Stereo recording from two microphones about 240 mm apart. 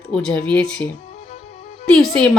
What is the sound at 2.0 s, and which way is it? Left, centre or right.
Speech, centre.